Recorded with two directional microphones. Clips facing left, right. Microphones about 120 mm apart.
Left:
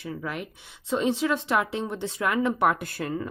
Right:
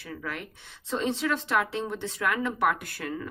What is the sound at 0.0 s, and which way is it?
A woman's voice, 20° left (ahead or behind).